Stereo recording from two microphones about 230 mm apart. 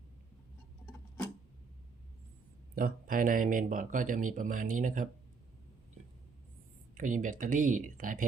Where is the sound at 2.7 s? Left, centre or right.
Right.